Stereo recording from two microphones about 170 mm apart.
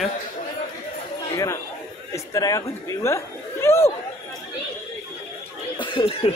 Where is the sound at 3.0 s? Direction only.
15° left (ahead or behind).